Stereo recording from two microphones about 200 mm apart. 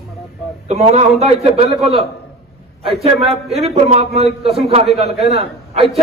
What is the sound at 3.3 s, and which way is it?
A man's voice, 30° right (ahead or behind).